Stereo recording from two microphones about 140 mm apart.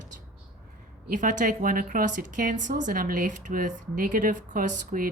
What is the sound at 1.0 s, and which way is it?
A woman's voice, 65° right (ahead or behind).